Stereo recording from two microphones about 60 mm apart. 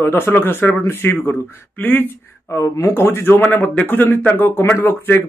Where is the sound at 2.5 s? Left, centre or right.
Left.